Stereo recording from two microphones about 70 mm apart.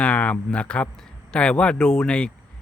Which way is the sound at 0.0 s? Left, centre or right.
Centre.